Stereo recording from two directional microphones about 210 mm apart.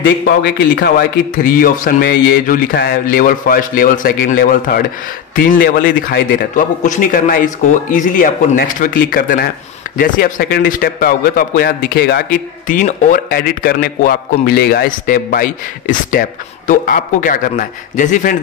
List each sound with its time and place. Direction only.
0.0 s a man's voice: 50° left (ahead or behind)